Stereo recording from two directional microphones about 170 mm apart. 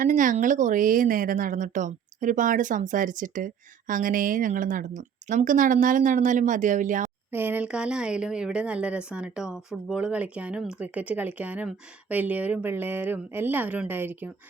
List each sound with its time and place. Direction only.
0.0 s a woman's voice: 50° right (ahead or behind)
7.3 s speech: 10° right (ahead or behind)